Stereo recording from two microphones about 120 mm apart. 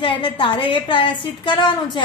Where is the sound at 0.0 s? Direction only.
45° left (ahead or behind).